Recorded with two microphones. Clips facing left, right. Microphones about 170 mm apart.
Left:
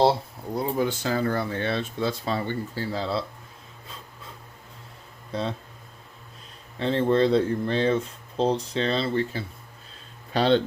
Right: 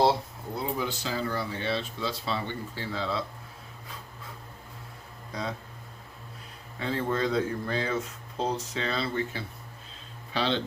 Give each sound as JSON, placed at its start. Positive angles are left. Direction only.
{"t": 0.5, "sound": "speech", "side_deg": 50}
{"t": 5.3, "sound": "speech", "side_deg": 30}
{"t": 6.7, "sound": "speech", "side_deg": 30}
{"t": 10.3, "sound": "speech", "side_deg": 45}